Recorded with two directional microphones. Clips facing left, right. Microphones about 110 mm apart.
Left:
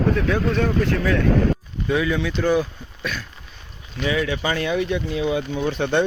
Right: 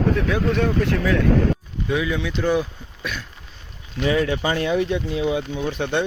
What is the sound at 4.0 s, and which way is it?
Speech, 40° right (ahead or behind).